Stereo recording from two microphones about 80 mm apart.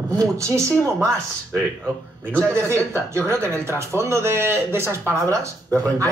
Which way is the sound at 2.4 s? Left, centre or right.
Right.